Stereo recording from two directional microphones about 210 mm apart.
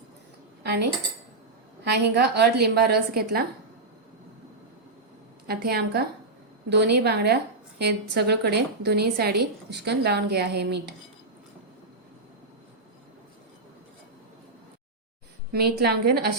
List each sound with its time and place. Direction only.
0.6 s dishes: 50° right (ahead or behind)
1.8 s a woman's voice: 50° right (ahead or behind)
5.5 s a woman's voice: 50° right (ahead or behind)
15.5 s a woman's voice: 50° right (ahead or behind)